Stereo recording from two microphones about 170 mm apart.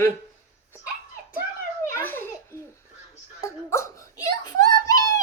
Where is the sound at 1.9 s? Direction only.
15° left (ahead or behind).